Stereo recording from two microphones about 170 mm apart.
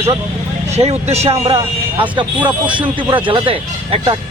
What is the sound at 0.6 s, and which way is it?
Speech, 40° right (ahead or behind).